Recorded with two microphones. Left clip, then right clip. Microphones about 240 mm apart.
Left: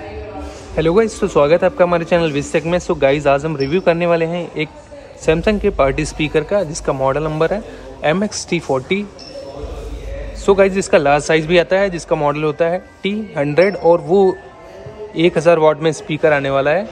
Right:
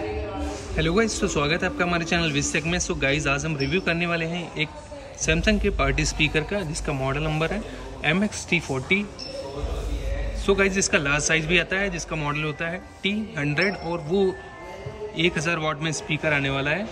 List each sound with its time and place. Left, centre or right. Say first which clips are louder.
0.7 s a man's voice: left 9 dB; centre
11.4 s a man's voice: left 9 dB; centre